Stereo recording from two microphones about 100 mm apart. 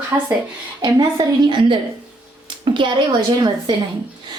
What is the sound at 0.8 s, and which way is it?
Speech, 45° right (ahead or behind).